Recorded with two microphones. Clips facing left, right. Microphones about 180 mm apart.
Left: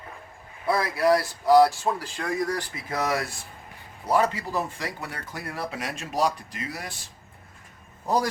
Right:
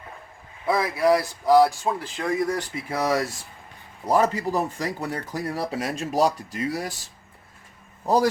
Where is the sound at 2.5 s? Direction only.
25° right (ahead or behind).